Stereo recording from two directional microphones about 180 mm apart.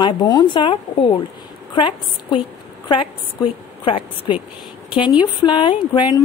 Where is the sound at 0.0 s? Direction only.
20° left (ahead or behind).